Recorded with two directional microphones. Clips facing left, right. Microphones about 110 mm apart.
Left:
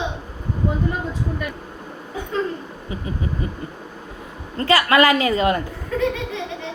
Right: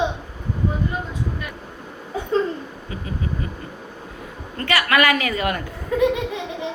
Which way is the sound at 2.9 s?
25° left (ahead or behind).